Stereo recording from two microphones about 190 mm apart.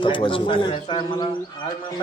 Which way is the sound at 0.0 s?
25° left (ahead or behind).